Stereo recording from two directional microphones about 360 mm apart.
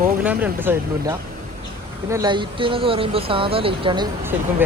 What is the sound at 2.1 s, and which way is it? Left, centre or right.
Speech, centre.